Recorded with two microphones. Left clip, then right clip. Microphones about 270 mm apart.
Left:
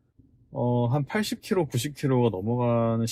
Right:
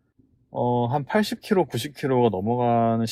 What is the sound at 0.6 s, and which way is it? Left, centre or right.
Speech, right.